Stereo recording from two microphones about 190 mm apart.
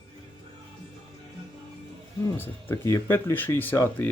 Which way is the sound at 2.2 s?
10° left (ahead or behind).